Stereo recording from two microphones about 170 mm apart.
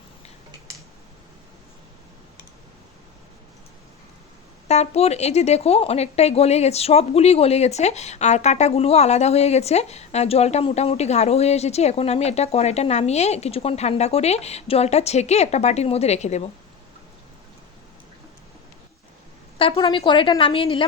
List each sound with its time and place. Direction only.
4.7 s speech: 40° left (ahead or behind)
19.5 s speech: 30° left (ahead or behind)